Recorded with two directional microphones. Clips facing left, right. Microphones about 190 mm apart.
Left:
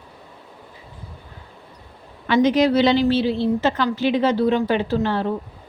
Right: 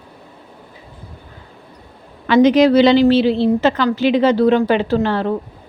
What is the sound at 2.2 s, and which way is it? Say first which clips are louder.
A woman's voice: right 6 dB; 90° right.